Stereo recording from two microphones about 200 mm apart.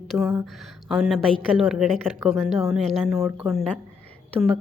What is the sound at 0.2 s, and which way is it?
A woman's voice, 15° right (ahead or behind).